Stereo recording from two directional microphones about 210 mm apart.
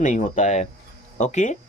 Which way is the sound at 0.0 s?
35° left (ahead or behind).